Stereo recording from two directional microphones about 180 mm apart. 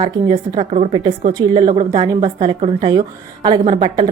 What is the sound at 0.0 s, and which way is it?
A woman's voice, 30° right (ahead or behind).